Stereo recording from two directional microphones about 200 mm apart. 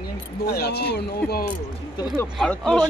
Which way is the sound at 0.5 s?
50° left (ahead or behind).